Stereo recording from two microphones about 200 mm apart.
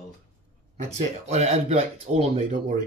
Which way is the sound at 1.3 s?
35° right (ahead or behind).